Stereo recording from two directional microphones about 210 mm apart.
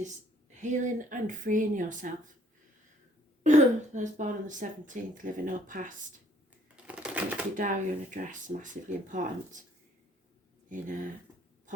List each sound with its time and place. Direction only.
0.5 s speech: 35° right (ahead or behind)
3.4 s speech: 35° right (ahead or behind)
6.8 s typewriter: 5° right (ahead or behind)
7.5 s speech: 40° right (ahead or behind)
10.7 s speech: 40° right (ahead or behind)